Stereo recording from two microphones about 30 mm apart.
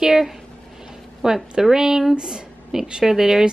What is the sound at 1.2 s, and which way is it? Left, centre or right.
Speech, centre.